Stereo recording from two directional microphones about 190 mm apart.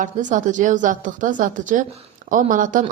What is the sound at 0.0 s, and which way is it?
A woman's voice, 40° right (ahead or behind).